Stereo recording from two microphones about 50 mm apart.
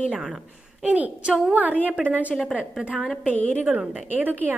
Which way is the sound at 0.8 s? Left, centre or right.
Right.